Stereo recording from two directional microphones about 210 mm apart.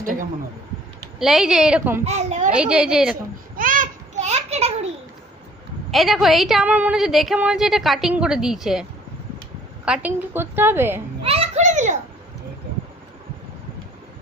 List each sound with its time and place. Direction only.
0.0 s speech: 40° right (ahead or behind)
1.2 s a woman's voice: centre (ahead or behind)
2.0 s a woman's voice: 35° right (ahead or behind)
2.5 s a woman's voice: 5° right (ahead or behind)
3.6 s a sound: 40° right (ahead or behind)
5.9 s a woman's voice: centre (ahead or behind)
11.2 s a child's voice: 30° right (ahead or behind)